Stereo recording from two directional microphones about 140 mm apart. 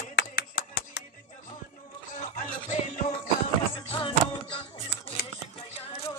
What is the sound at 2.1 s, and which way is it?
Music, 55° left (ahead or behind).